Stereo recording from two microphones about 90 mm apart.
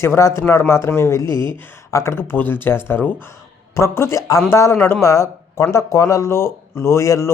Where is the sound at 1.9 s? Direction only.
30° left (ahead or behind).